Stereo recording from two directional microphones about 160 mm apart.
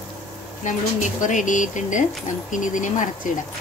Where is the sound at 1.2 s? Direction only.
50° left (ahead or behind).